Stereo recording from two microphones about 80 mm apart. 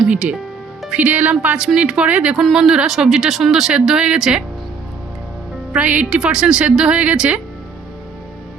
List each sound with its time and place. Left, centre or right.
0.1 s a woman's voice: centre
2.3 s speech: centre
5.7 s a woman's voice: centre